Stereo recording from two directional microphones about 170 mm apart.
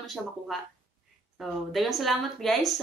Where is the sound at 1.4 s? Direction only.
Centre (ahead or behind).